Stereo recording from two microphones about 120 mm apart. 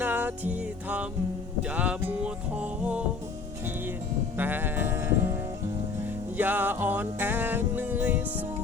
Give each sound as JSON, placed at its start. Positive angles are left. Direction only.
{"t": 0.0, "sound": "music", "side_deg": -15}
{"t": 4.4, "sound": "sheep", "side_deg": -15}
{"t": 6.3, "sound": "music", "side_deg": -15}